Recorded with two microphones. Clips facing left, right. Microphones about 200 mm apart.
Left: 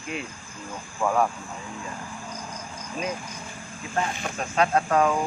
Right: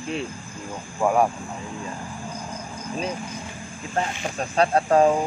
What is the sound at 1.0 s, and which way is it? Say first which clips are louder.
Music: right 3 dB; 15° right (ahead or behind).